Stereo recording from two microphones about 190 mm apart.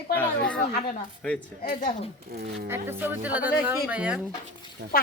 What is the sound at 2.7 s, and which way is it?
Speech, 10° right (ahead or behind).